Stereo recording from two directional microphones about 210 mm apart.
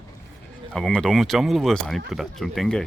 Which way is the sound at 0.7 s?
Centre (ahead or behind).